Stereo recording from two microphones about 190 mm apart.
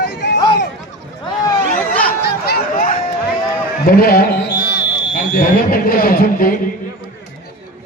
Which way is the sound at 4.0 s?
50° left (ahead or behind).